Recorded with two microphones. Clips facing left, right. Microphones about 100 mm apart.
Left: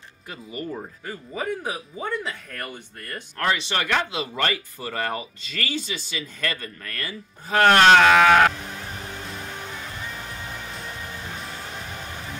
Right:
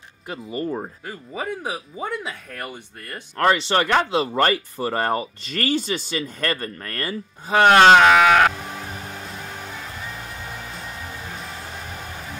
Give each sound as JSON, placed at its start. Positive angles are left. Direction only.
{"t": 0.3, "sound": "speech", "side_deg": -30}
{"t": 1.0, "sound": "speech", "side_deg": -10}
{"t": 3.3, "sound": "speech", "side_deg": -40}
{"t": 7.4, "sound": "speech", "side_deg": -15}
{"t": 8.8, "sound": "music", "side_deg": -5}
{"t": 10.5, "sound": "hair dryer", "side_deg": 0}